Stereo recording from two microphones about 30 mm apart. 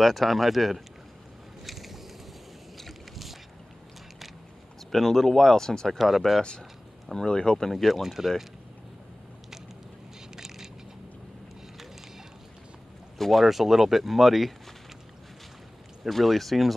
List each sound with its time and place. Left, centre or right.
0.0 s speech: centre
1.6 s a sound: centre
4.9 s speech: centre
5.9 s speech: centre
7.2 s speech: left
7.7 s speech: centre
10.3 s a sound: centre
13.2 s speech: centre
13.5 s speech: centre
16.0 s speech: centre